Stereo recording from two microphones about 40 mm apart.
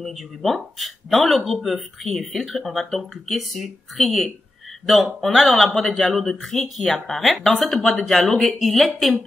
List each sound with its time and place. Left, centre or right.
0.0 s speech: centre